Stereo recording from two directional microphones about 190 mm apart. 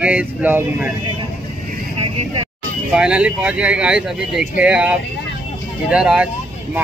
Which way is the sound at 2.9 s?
5° right (ahead or behind).